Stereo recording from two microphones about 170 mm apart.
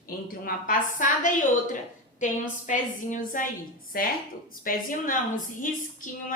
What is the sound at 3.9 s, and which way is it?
A woman's voice, 60° left (ahead or behind).